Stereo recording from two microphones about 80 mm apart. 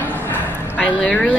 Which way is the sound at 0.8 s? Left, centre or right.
Centre.